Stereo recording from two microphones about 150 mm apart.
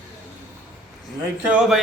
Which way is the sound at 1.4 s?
10° right (ahead or behind).